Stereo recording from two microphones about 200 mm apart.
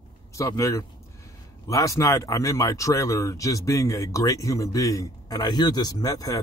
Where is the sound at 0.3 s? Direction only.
15° left (ahead or behind).